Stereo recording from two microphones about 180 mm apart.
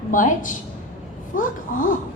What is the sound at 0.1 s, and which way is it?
A woman's voice, 45° left (ahead or behind).